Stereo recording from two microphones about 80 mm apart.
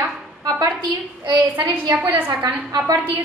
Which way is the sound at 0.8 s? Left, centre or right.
Right.